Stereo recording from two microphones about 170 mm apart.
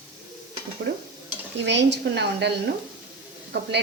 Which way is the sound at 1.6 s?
90° right.